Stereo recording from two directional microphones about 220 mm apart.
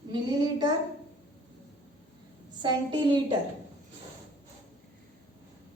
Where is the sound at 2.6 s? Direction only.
20° right (ahead or behind).